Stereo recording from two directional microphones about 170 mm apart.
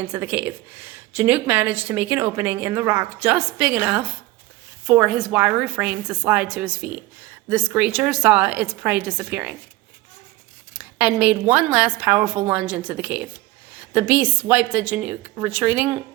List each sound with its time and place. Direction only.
0.0 s a woman's voice: 10° right (ahead or behind)
10.8 s a woman's voice: 10° right (ahead or behind)